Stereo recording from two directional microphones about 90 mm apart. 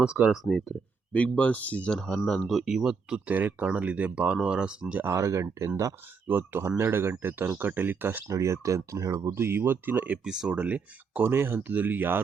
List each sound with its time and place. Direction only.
0.0 s speech: 10° right (ahead or behind)
1.1 s speech: 15° left (ahead or behind); by 5.0 s 10° right (ahead or behind)
5.0 s speech: 35° right (ahead or behind)
6.2 s speech: 25° right (ahead or behind)
8.3 s speech: 35° right (ahead or behind)
10.2 s speech: 10° right (ahead or behind)